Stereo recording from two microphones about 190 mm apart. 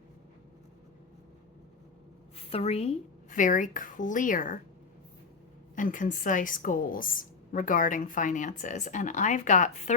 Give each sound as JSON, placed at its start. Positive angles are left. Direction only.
{"t": 2.3, "sound": "a woman's voice", "side_deg": 30}
{"t": 5.7, "sound": "a woman's voice", "side_deg": 45}